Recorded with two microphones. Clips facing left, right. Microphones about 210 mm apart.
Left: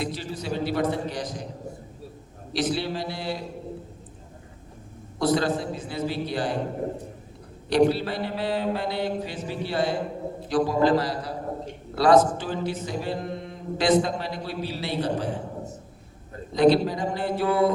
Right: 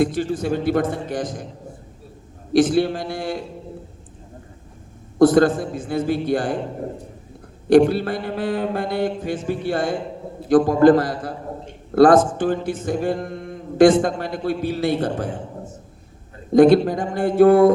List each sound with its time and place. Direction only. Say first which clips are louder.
0.0 s speech: right 10 dB; 50° right (ahead or behind)
2.5 s speech: right 10 dB; 50° right (ahead or behind)
5.2 s speech: right 9 dB; 50° right (ahead or behind)
7.7 s speech: right 6 dB; 50° right (ahead or behind)
16.5 s speech: right 7 dB; 50° right (ahead or behind)